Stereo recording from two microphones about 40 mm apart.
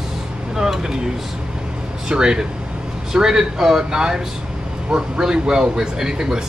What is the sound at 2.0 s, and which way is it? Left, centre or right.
Speech, centre.